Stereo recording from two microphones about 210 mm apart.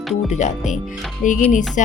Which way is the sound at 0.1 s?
35° left (ahead or behind).